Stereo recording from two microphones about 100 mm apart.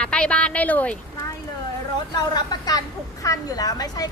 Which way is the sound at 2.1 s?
40° left (ahead or behind).